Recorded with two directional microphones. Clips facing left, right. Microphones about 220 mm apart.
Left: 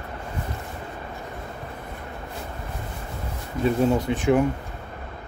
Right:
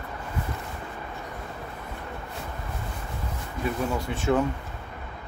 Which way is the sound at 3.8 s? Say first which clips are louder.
Left 7 dB; 20° left (ahead or behind).